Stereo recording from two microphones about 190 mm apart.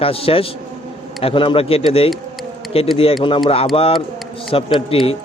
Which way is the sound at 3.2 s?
25° left (ahead or behind).